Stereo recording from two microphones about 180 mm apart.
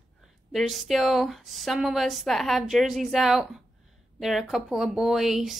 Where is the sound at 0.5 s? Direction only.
Centre (ahead or behind).